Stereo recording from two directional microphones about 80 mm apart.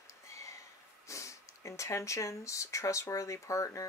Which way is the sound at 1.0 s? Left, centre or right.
Left.